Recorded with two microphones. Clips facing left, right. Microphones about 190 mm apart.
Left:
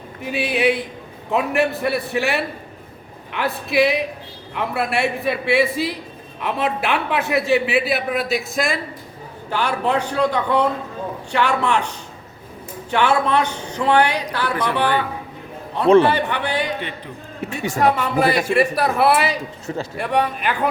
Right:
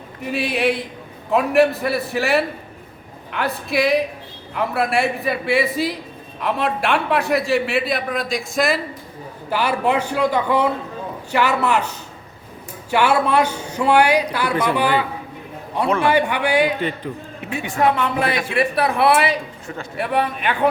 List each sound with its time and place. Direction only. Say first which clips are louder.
0.2 s a man's voice: left 1 dB; centre (ahead or behind)
12.9 s speech: right 1 dB; 10° right (ahead or behind)
16.0 s speech: right 2 dB; 10° right (ahead or behind)
17.4 s a woman's voice: even; 40° left (ahead or behind)
17.7 s a man's voice: left 1 dB; centre (ahead or behind)